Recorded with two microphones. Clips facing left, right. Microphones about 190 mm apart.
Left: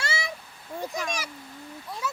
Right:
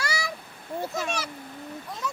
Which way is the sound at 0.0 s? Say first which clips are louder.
Right 1 dB; 25° left (ahead or behind).